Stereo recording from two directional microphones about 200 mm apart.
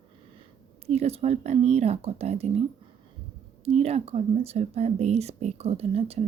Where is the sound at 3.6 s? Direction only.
30° right (ahead or behind).